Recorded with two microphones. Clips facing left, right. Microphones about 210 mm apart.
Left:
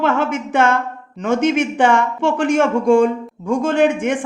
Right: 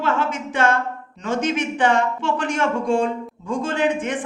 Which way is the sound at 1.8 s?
50° left (ahead or behind).